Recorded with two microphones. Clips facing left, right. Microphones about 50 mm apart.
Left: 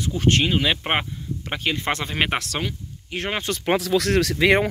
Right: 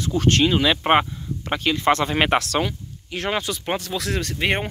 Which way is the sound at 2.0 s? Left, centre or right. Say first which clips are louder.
Right 4 dB; centre.